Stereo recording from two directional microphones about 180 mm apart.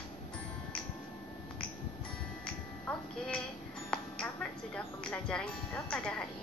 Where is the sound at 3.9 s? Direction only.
5° left (ahead or behind).